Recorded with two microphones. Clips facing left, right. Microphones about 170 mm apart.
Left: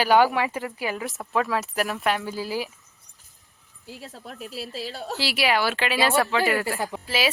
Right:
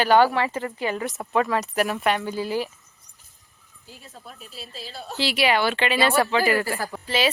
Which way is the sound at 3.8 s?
70° left (ahead or behind).